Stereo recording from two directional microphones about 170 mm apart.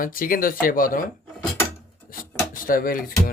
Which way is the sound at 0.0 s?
55° left (ahead or behind).